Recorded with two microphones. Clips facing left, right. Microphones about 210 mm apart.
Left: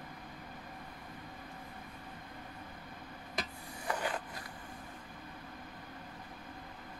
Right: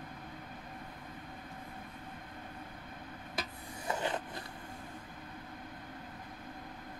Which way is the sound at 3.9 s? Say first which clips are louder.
Right 1 dB; 25° right (ahead or behind).